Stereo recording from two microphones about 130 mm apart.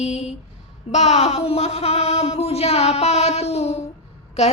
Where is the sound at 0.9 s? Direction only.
55° left (ahead or behind).